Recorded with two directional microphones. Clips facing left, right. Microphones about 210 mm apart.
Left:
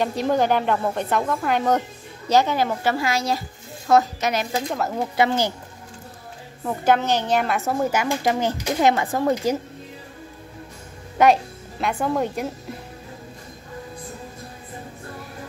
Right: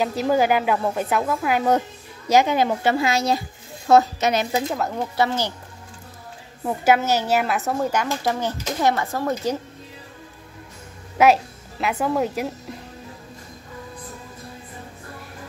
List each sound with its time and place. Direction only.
0.0 s a woman's voice: 5° right (ahead or behind); by 4.6 s 20° right (ahead or behind)
4.6 s speech: centre (ahead or behind)
5.1 s speech: 15° left (ahead or behind)
6.6 s a woman's voice: 10° right (ahead or behind)
7.8 s speech: 10° left (ahead or behind)
11.2 s speech: 5° right (ahead or behind)